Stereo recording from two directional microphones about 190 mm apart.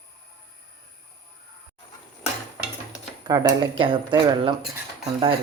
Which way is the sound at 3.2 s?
20° right (ahead or behind).